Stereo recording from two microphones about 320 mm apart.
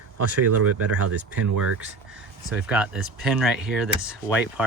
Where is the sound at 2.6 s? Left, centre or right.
Centre.